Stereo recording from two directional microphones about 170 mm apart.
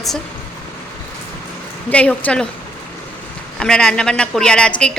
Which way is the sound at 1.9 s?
10° left (ahead or behind).